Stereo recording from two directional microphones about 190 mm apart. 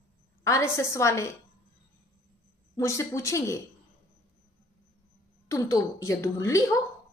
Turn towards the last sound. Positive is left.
turn(degrees=15)  # may be behind; listen again after turning